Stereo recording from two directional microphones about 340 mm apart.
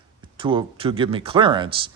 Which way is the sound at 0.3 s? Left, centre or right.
Centre.